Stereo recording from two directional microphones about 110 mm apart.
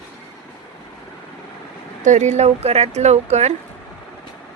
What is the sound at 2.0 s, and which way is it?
Speech, 90° right.